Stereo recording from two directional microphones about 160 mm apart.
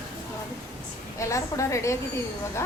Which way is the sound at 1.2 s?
20° left (ahead or behind).